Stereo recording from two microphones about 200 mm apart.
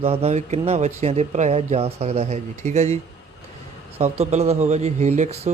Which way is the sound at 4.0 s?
30° right (ahead or behind).